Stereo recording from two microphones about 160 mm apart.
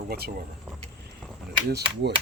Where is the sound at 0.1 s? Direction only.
70° right (ahead or behind).